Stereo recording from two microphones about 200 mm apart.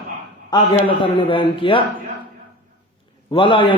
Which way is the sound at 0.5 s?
25° left (ahead or behind).